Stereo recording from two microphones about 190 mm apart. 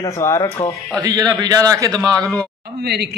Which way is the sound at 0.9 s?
20° right (ahead or behind).